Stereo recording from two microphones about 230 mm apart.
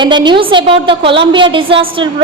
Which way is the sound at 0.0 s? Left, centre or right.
Centre.